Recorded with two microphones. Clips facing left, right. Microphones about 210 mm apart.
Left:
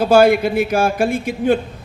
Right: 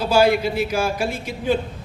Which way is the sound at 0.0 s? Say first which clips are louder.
Left 5 dB; 50° left (ahead or behind).